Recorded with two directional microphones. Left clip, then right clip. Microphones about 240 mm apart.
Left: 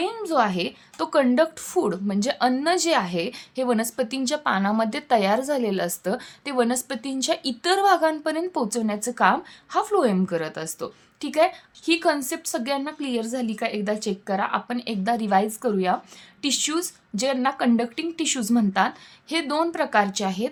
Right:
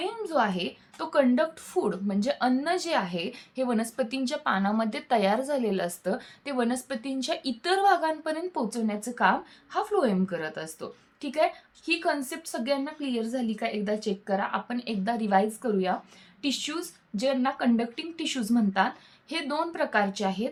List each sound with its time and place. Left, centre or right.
0.0 s a woman's voice: left